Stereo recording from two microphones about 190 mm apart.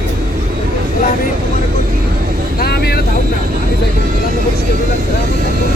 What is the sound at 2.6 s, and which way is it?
Vehicle, 55° left (ahead or behind).